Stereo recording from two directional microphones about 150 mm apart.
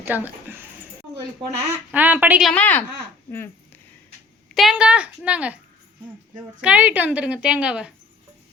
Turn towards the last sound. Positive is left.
turn(degrees=-5)  # may be behind; listen again after turning